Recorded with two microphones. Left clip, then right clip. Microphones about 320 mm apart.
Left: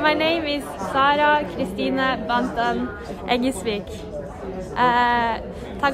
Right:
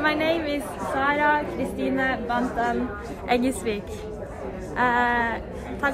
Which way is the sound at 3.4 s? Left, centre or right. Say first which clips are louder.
Left 2 dB; left.